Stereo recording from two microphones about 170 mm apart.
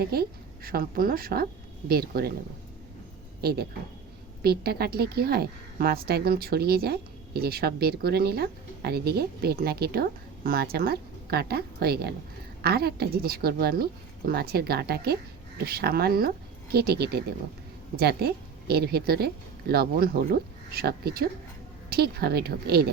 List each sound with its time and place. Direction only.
0.0 s a woman's voice: 65° right (ahead or behind)
3.4 s a woman's voice: 65° right (ahead or behind)